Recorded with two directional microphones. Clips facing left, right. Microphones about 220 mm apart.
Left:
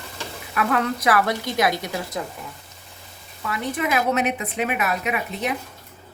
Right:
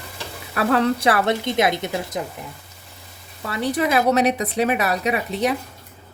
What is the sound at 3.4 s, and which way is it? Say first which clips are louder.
Speech: right 4 dB; 35° right (ahead or behind).